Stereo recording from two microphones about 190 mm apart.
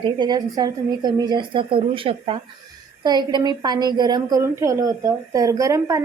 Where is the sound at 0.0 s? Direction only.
20° right (ahead or behind).